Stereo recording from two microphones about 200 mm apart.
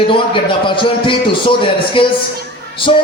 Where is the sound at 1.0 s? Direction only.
25° left (ahead or behind).